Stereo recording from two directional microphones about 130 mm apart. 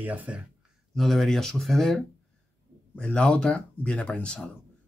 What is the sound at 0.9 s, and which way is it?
Speech, centre (ahead or behind).